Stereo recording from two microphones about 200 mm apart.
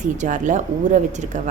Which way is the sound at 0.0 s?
40° right (ahead or behind).